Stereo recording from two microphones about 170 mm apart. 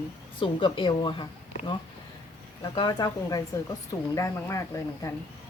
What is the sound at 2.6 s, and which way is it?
Speech, 25° left (ahead or behind).